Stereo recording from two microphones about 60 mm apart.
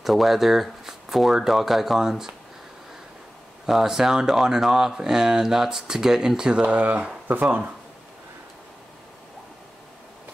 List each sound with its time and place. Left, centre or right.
0.0 s speech: centre
3.6 s speech: centre; by 7.7 s right